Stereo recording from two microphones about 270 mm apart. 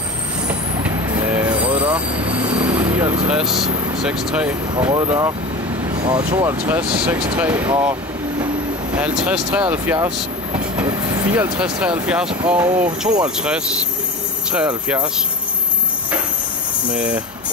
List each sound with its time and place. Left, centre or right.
0.5 s vehicle: centre
5.9 s speech: centre
6.7 s speech: centre
8.9 s speech: centre
16.9 s speech: centre